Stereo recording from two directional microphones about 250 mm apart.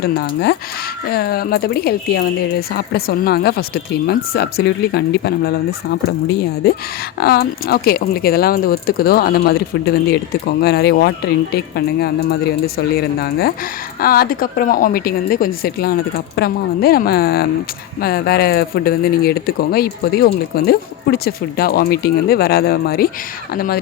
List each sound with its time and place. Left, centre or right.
0.0 s speech: left